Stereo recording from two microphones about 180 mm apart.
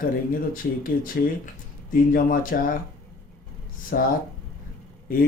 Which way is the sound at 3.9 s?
55° left (ahead or behind).